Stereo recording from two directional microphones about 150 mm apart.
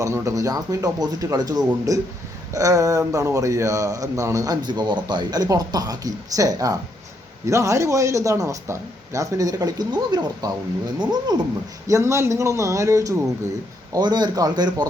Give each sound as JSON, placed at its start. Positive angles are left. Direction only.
{"t": 0.0, "sound": "a man's voice", "side_deg": -20}